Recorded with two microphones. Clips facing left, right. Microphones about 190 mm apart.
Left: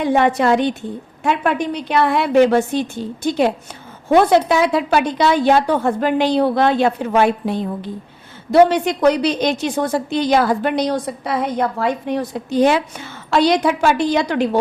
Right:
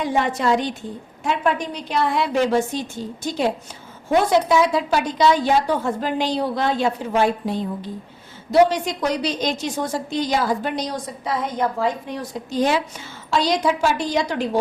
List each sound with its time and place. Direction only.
0.0 s a woman's voice: 60° left (ahead or behind)